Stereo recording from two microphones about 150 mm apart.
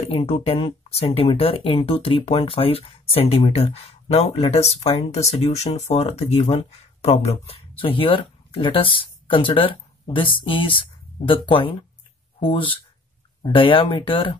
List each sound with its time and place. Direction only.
0.1 s speech: 40° left (ahead or behind)